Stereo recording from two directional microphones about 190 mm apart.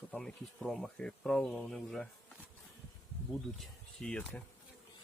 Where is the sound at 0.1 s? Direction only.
5° left (ahead or behind).